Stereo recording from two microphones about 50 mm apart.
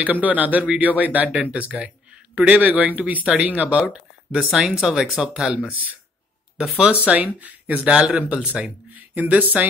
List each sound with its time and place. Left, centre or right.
0.0 s speech: right; by 5.2 s centre
5.7 s speech: right